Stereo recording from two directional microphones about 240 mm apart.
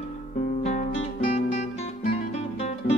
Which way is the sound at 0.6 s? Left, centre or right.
Left.